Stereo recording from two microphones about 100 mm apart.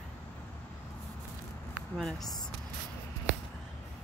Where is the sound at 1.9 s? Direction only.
5° left (ahead or behind).